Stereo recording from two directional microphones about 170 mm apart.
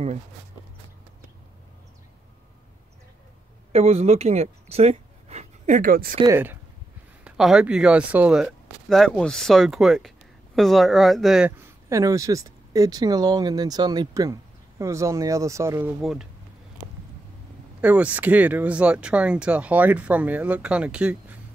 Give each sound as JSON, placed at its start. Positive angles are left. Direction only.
{"t": 3.7, "sound": "speech", "side_deg": -40}
{"t": 6.2, "sound": "speech", "side_deg": -15}
{"t": 7.2, "sound": "speech", "side_deg": -5}
{"t": 11.9, "sound": "speech", "side_deg": -20}
{"t": 16.0, "sound": "speech", "side_deg": 0}
{"t": 17.7, "sound": "speech", "side_deg": -10}